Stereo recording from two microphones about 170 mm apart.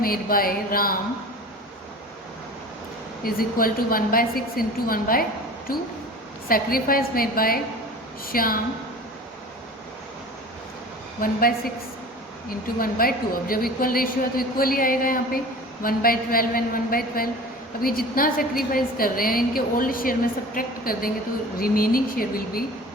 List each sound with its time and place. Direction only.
0.0 s a woman's voice: 60° left (ahead or behind)
3.2 s a woman's voice: 60° left (ahead or behind)
11.2 s a woman's voice: 60° left (ahead or behind)